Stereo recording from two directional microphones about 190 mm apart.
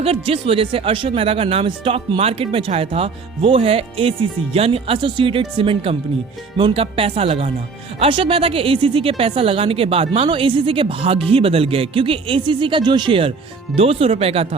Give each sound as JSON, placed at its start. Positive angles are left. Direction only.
{"t": 0.0, "sound": "speech", "side_deg": -30}